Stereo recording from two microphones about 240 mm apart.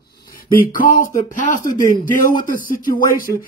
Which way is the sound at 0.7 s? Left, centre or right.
Left.